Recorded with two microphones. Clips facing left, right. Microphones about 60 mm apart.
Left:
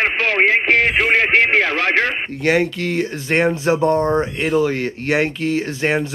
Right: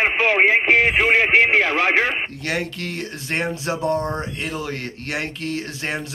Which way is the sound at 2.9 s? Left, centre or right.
Left.